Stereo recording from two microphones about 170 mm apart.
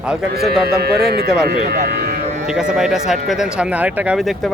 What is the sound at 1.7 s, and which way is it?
Speech, 70° right (ahead or behind).